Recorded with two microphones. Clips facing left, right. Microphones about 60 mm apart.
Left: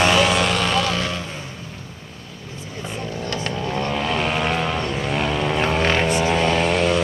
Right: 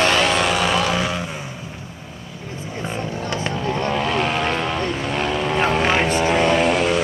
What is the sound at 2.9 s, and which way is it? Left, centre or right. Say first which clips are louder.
Vehicle: right 2 dB; centre.